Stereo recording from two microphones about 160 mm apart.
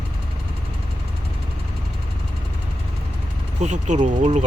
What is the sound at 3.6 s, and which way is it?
Speech, 50° right (ahead or behind).